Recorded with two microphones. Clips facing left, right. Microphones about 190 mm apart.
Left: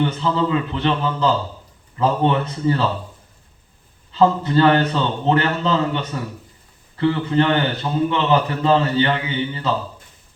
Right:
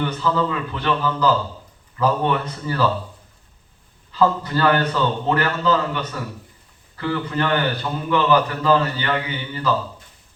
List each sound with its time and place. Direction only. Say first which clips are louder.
0.0 s a man's voice: left 2 dB; 25° left (ahead or behind)
4.1 s a man's voice: left 3 dB; 25° left (ahead or behind)